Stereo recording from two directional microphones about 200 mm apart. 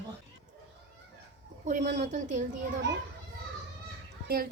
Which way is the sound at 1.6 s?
40° right (ahead or behind).